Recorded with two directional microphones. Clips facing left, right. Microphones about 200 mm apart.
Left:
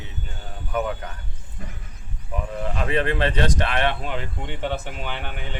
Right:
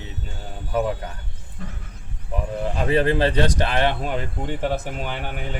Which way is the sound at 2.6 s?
35° right (ahead or behind).